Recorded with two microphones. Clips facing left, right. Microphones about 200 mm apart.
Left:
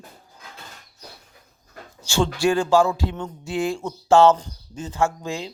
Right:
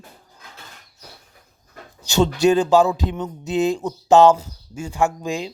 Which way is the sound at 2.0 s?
20° right (ahead or behind).